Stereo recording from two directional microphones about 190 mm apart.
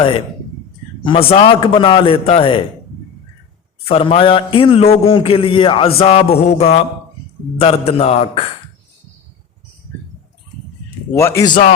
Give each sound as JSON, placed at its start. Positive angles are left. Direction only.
{"t": 1.0, "sound": "a man's voice", "side_deg": 30}
{"t": 3.8, "sound": "a man's voice", "side_deg": 30}
{"t": 6.0, "sound": "a sound", "side_deg": 35}
{"t": 11.1, "sound": "a man's voice", "side_deg": 15}